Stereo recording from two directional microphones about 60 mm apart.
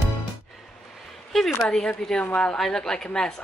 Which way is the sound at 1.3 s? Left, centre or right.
Centre.